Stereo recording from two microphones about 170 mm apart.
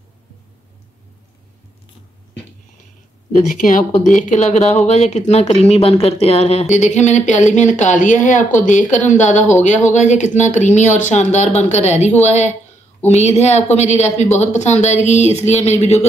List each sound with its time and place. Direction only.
3.4 s a woman's voice: 50° left (ahead or behind)